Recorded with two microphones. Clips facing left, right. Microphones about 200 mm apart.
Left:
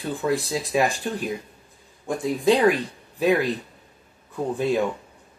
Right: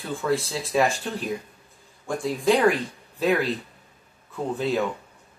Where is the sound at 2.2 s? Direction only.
20° left (ahead or behind).